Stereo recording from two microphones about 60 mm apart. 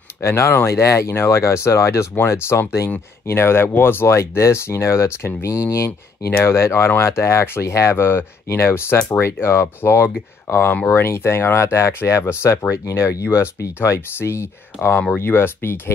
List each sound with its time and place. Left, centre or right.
0.2 s speech: left